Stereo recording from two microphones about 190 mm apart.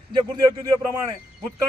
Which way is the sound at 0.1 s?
20° right (ahead or behind).